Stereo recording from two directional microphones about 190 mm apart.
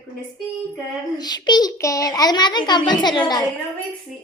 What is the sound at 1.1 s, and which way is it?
A child's voice, 20° left (ahead or behind).